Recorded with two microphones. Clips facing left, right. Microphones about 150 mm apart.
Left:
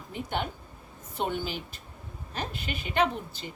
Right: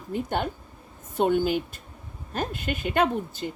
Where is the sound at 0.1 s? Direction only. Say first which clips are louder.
Right 5 dB; 45° right (ahead or behind).